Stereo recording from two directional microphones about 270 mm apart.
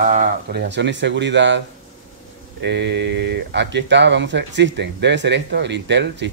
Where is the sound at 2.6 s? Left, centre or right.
Right.